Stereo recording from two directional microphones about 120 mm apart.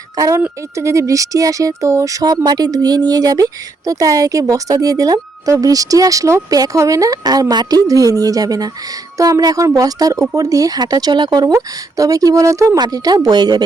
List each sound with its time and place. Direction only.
0.2 s speech: 25° right (ahead or behind)